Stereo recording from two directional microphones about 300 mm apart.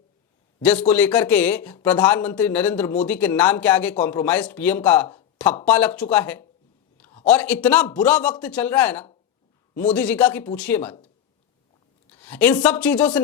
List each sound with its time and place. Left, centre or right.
0.6 s speech: centre
6.9 s a sound: centre
7.3 s speech: centre
12.0 s speech: centre